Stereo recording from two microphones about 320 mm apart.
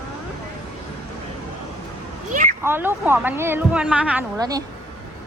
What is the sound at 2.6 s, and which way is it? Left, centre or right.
A woman's voice, centre.